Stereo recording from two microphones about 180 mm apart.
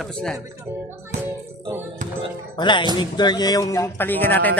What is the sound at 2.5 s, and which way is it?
A man's voice, 25° left (ahead or behind).